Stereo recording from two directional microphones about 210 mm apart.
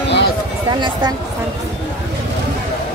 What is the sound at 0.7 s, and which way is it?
Speech, 20° right (ahead or behind).